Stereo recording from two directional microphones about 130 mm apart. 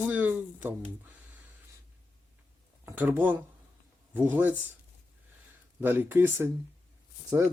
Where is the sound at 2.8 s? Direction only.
15° right (ahead or behind).